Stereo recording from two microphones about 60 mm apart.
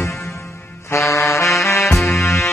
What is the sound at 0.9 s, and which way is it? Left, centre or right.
Music, left.